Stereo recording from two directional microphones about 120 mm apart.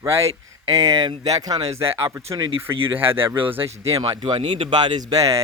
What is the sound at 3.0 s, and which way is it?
Speech, 20° right (ahead or behind).